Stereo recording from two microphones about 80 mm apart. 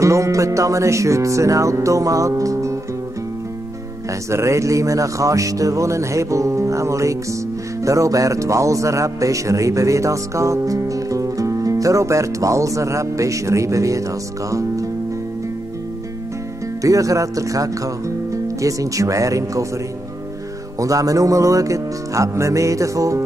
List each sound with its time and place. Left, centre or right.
0.0 s music: right
4.1 s music: right
16.8 s speech: right
20.8 s speech: right